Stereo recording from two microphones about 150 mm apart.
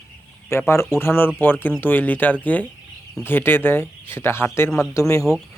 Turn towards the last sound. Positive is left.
turn(degrees=20)  # may be behind; listen again after turning